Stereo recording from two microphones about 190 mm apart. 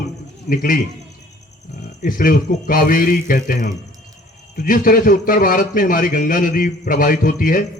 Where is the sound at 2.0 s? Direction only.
45° left (ahead or behind).